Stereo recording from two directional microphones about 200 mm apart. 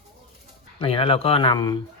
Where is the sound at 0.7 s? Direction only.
30° left (ahead or behind).